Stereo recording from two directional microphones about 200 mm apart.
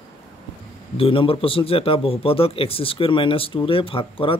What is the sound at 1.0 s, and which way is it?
A man's voice, 25° left (ahead or behind).